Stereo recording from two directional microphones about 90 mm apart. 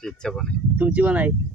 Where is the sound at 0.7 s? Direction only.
15° right (ahead or behind).